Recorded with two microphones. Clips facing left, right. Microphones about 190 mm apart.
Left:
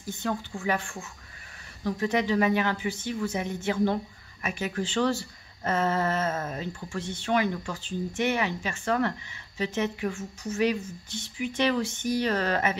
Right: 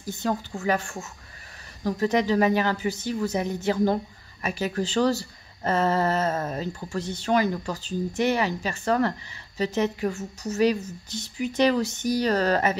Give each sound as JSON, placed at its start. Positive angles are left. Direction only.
{"t": 0.0, "sound": "a woman's voice", "side_deg": -40}